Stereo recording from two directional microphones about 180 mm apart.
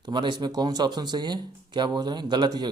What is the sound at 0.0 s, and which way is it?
Speech, 25° right (ahead or behind).